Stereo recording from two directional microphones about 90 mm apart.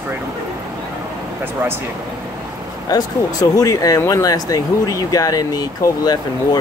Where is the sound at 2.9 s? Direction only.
45° left (ahead or behind).